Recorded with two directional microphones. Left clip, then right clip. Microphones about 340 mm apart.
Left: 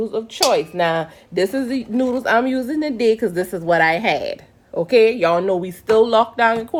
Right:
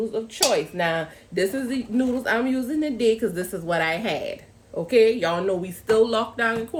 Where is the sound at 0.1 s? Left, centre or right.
Centre.